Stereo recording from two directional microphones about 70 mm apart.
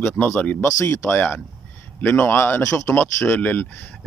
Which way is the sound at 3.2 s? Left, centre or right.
Left.